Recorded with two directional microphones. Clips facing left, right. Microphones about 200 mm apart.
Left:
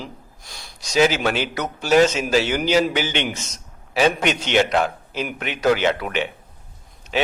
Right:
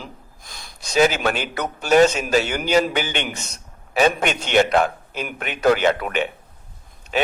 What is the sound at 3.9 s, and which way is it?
A man's voice, 50° right (ahead or behind).